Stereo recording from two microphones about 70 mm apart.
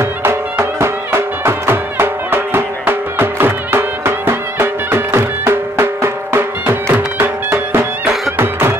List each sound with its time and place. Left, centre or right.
0.0 s music: right